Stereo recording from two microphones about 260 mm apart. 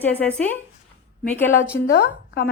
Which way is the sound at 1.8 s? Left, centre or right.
Left.